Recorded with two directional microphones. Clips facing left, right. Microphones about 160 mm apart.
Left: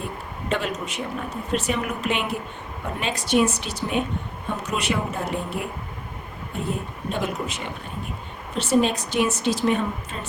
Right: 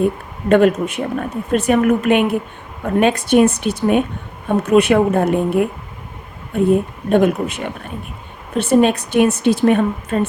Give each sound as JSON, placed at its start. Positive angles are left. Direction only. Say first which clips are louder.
{"t": 0.0, "sound": "a woman's voice", "louder": "right 13 dB", "side_deg": -55}